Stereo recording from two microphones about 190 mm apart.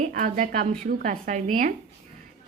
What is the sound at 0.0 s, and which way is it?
A woman's voice, 40° right (ahead or behind).